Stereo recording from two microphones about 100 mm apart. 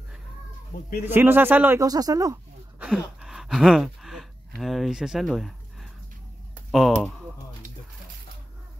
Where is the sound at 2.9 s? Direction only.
Centre (ahead or behind).